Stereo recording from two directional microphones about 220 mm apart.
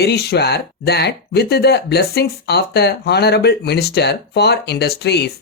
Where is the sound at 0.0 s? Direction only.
45° left (ahead or behind).